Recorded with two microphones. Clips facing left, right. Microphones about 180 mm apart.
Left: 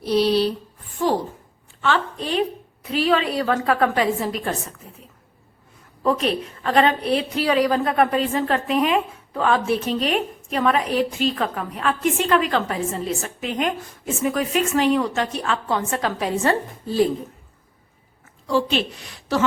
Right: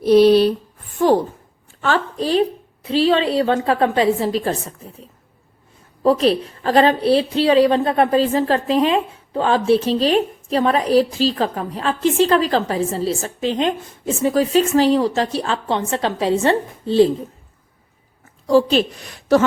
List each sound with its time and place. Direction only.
0.0 s speech: 55° right (ahead or behind)
1.8 s a woman's voice: 40° right (ahead or behind)
6.0 s a woman's voice: 35° right (ahead or behind)
18.4 s a woman's voice: 40° right (ahead or behind)